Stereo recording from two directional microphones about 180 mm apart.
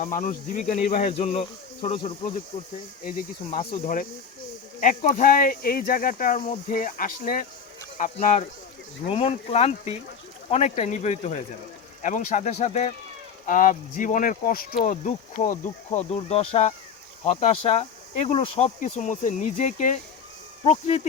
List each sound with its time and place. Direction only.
0.0 s speech: 45° left (ahead or behind)
1.1 s speech: 35° left (ahead or behind)
3.0 s speech: 50° left (ahead or behind)
4.8 s speech: 45° left (ahead or behind)